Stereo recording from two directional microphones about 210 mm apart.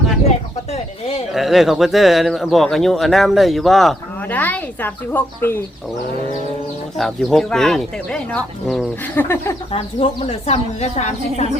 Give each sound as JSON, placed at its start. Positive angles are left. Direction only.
{"t": 0.3, "sound": "speech", "side_deg": 30}
{"t": 1.3, "sound": "speech", "side_deg": 0}
{"t": 7.0, "sound": "speech", "side_deg": 0}
{"t": 9.7, "sound": "a woman's voice", "side_deg": 25}